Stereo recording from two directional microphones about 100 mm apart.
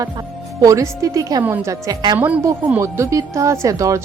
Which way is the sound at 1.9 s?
45° right (ahead or behind).